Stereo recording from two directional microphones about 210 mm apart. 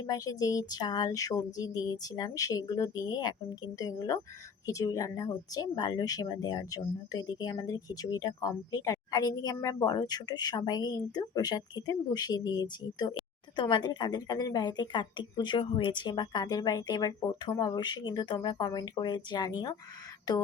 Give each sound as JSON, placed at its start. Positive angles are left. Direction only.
{"t": 0.0, "sound": "a woman's voice", "side_deg": 15}